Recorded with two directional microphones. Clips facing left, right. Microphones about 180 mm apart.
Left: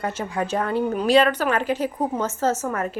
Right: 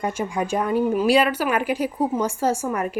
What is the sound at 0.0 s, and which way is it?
A woman's voice, 10° right (ahead or behind).